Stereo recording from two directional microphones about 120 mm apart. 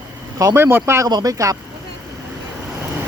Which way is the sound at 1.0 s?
30° right (ahead or behind).